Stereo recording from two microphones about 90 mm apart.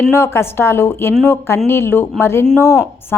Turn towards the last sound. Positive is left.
turn(degrees=30)  # may be behind; listen again after turning